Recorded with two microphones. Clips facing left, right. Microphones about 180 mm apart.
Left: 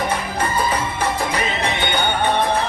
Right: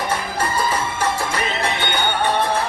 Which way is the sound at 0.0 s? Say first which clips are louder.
Left 1 dB; 15° left (ahead or behind).